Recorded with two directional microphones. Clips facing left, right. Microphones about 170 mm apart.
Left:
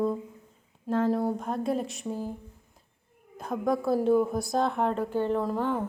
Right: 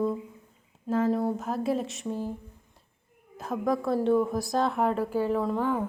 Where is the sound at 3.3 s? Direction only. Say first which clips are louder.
Even; centre (ahead or behind).